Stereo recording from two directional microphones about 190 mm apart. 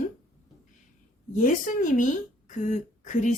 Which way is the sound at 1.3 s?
45° left (ahead or behind).